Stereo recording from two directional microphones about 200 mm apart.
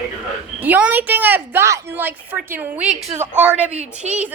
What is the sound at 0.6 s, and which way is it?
A woman's voice, 10° right (ahead or behind).